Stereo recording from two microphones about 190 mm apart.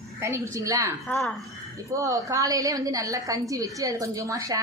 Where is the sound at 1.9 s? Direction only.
15° right (ahead or behind).